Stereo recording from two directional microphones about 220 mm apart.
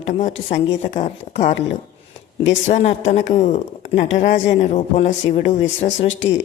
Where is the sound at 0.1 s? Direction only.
35° left (ahead or behind).